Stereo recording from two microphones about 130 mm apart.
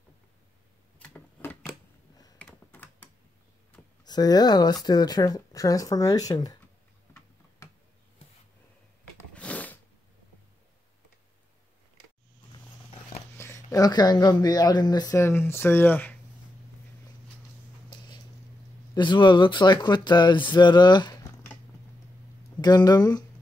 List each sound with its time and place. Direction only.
0.9 s a sound: 15° left (ahead or behind)
2.4 s computer keyboard: 15° left (ahead or behind)
4.0 s speech: 30° left (ahead or behind)
9.3 s a sound: 10° left (ahead or behind)
13.4 s speech: 25° left (ahead or behind)
18.9 s speech: 35° left (ahead or behind)
22.6 s speech: 30° left (ahead or behind)